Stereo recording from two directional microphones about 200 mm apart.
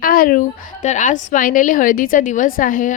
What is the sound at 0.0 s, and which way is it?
A woman's voice, 45° left (ahead or behind).